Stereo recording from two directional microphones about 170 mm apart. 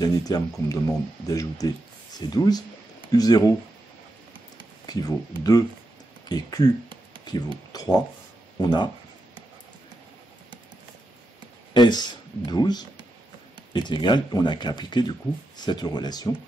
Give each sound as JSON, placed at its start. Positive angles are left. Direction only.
{"t": 0.0, "sound": "speech", "side_deg": 20}
{"t": 4.8, "sound": "speech", "side_deg": 20}
{"t": 11.7, "sound": "a sound", "side_deg": 25}
{"t": 12.4, "sound": "speech", "side_deg": 25}